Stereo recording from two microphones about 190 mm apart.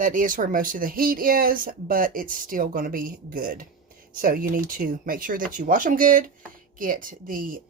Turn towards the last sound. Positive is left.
turn(degrees=-45)  # may be behind; listen again after turning